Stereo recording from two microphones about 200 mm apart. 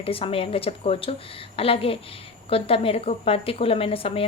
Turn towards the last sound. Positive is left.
turn(degrees=30)  # may be behind; listen again after turning